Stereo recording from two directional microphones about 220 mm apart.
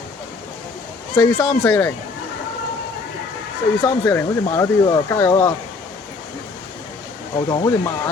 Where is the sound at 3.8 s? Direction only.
10° left (ahead or behind).